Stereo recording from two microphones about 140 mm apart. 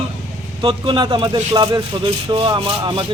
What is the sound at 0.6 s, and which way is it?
A man's voice, 35° right (ahead or behind).